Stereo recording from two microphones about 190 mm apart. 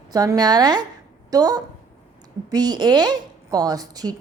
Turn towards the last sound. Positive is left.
turn(degrees=-20)  # may be behind; listen again after turning